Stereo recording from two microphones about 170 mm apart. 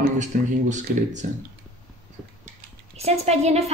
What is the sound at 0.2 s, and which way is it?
Speech, 45° right (ahead or behind).